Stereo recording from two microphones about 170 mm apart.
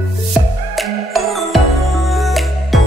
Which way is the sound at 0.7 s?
Centre (ahead or behind).